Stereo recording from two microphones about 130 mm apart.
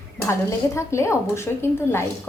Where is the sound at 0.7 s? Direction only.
20° left (ahead or behind).